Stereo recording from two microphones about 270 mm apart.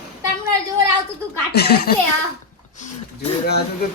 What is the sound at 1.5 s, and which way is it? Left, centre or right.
Speech, left.